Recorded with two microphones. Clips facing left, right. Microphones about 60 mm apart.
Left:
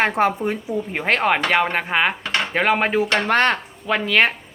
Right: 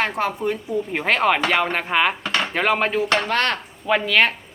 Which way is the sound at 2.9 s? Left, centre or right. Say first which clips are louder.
Left 2 dB; left.